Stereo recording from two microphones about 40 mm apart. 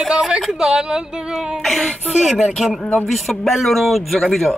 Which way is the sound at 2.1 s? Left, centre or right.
Centre.